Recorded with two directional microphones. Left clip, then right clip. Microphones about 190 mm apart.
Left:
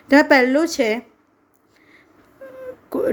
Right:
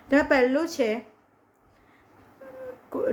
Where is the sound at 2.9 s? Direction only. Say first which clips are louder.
Left 6 dB; 45° left (ahead or behind).